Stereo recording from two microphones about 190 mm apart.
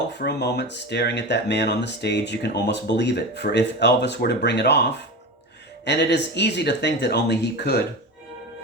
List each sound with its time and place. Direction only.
0.2 s speech: 60° left (ahead or behind)